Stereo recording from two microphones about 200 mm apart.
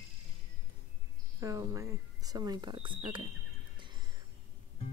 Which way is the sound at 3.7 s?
25° right (ahead or behind).